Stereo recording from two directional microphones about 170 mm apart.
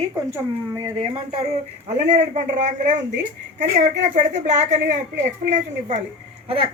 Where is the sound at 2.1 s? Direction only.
45° right (ahead or behind).